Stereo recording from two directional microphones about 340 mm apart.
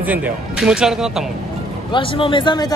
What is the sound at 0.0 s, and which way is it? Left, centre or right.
Speech, centre.